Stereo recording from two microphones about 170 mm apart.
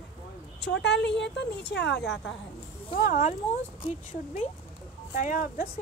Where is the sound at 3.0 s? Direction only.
45° left (ahead or behind).